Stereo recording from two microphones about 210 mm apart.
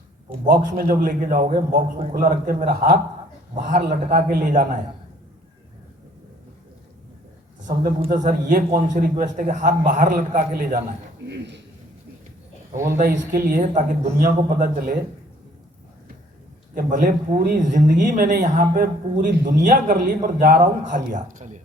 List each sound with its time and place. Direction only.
0.4 s speech: 45° right (ahead or behind)
7.7 s speech: 40° right (ahead or behind)
12.7 s speech: 10° right (ahead or behind)
13.0 s speech: 40° right (ahead or behind)
16.7 s speech: 40° right (ahead or behind)